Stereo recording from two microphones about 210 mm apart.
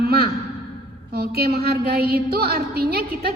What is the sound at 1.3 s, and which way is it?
A woman's voice, 50° right (ahead or behind).